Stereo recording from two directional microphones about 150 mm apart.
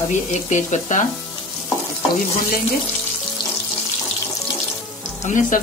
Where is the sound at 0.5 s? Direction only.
50° left (ahead or behind).